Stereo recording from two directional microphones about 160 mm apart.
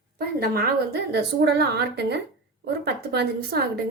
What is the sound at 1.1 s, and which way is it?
A woman's voice, 90° right.